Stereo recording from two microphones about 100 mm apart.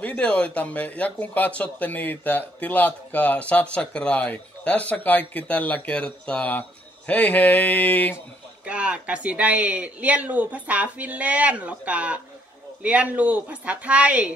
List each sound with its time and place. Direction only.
0.0 s speech: 10° left (ahead or behind)
8.6 s speech: 10° right (ahead or behind)